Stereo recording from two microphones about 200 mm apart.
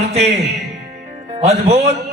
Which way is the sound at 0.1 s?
30° right (ahead or behind).